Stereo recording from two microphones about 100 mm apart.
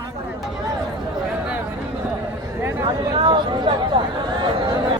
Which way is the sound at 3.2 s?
50° right (ahead or behind).